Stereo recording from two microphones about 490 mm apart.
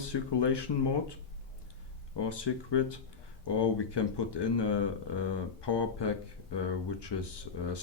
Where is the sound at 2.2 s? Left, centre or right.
Left.